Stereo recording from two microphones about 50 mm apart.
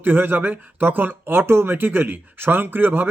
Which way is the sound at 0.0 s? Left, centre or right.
Right.